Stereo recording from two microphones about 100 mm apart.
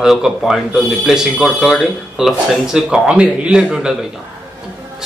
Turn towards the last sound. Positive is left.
turn(degrees=-5)  # may be behind; listen again after turning